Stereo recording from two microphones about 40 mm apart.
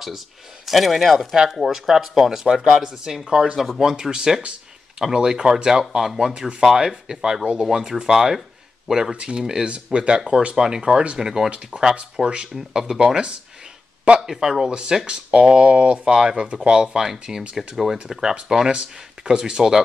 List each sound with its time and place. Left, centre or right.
0.7 s speech: centre
1.3 s speech: centre
3.5 s speech: centre
3.8 s speech: centre
9.1 s speech: right
9.4 s speech: centre
9.9 s speech: right
12.5 s speech: centre
18.7 s speech: right